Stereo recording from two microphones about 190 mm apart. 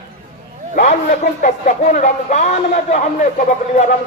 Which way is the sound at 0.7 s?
40° left (ahead or behind).